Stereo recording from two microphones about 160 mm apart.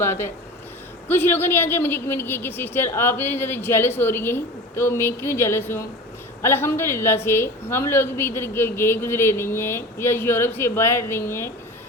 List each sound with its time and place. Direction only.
0.0 s a man's voice: 15° left (ahead or behind)